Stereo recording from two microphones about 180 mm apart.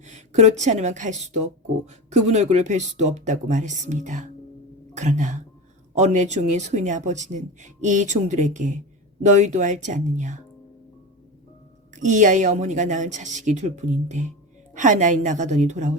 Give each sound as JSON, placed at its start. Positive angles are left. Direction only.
{"t": 0.1, "sound": "speech", "side_deg": -40}
{"t": 11.9, "sound": "speech", "side_deg": -45}